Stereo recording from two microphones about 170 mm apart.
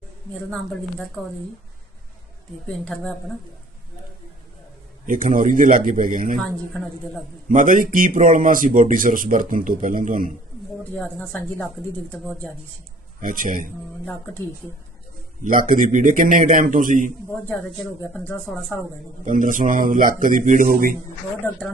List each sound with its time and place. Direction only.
0.5 s speech: 5° left (ahead or behind)
2.6 s speech: 5° left (ahead or behind)
5.0 s speech: 50° right (ahead or behind)
6.4 s speech: centre (ahead or behind)
7.4 s speech: 50° right (ahead or behind)
10.9 s speech: 5° left (ahead or behind)
13.2 s speech: 55° right (ahead or behind)
14.0 s speech: 10° left (ahead or behind)
15.4 s speech: 55° right (ahead or behind)
18.0 s speech: 10° left (ahead or behind)
19.2 s speech: 50° right (ahead or behind)